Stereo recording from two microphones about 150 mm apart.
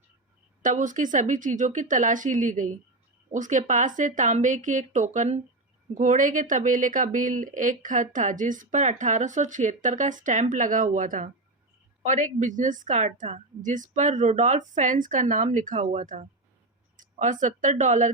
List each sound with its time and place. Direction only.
0.6 s speech: 60° right (ahead or behind)